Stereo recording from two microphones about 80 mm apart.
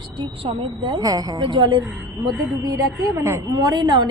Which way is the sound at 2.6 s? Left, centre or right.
Right.